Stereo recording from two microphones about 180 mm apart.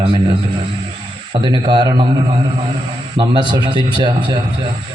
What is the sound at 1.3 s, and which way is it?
Speech, 25° right (ahead or behind).